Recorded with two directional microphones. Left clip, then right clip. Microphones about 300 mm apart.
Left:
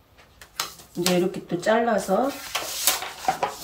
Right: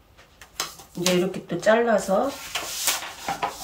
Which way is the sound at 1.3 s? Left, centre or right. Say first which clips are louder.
Right 2 dB; centre.